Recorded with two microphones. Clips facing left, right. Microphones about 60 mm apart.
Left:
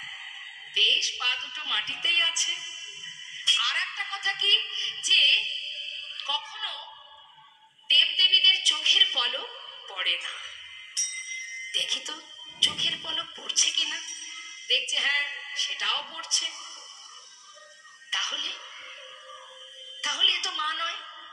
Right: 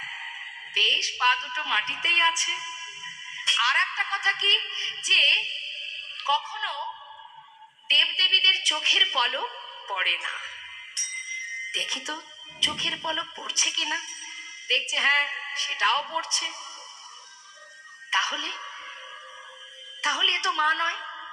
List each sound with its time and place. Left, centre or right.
0.0 s a woman's voice: right
7.9 s a woman's voice: right
18.1 s music: right
20.0 s a woman's voice: right